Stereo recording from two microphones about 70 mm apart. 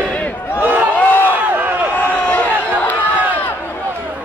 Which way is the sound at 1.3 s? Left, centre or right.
Right.